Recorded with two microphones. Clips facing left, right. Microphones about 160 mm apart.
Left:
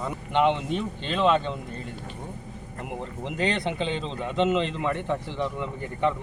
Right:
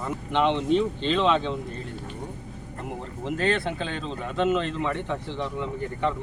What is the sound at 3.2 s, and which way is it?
Speech, 15° left (ahead or behind).